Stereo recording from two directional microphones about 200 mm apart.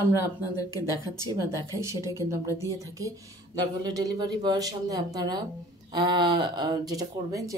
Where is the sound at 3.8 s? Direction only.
20° right (ahead or behind).